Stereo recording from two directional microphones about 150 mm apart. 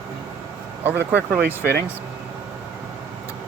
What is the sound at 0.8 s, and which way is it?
Speech, 10° right (ahead or behind).